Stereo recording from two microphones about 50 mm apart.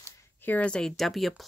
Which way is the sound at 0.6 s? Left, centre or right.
Centre.